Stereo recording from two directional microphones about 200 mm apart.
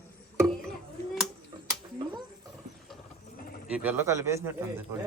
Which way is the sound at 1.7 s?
20° right (ahead or behind).